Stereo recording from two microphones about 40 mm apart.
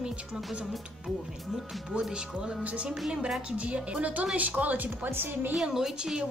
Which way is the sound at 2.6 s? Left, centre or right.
Right.